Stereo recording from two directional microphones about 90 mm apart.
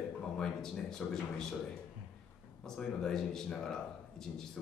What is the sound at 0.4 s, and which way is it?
Speech, 5° left (ahead or behind).